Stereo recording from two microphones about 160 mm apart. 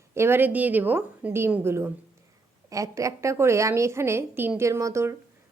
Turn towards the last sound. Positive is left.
turn(degrees=-20)  # may be behind; listen again after turning